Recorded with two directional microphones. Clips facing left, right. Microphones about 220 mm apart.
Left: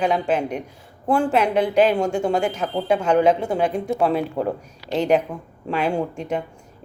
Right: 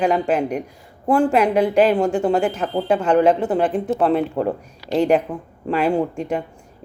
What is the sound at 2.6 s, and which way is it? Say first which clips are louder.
Speech: right 2 dB; 10° left (ahead or behind).